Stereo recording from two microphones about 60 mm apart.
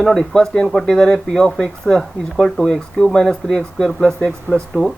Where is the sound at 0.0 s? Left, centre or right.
Centre.